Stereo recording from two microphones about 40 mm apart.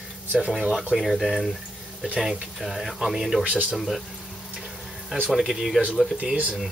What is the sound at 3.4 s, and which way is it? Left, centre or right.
Speech, right.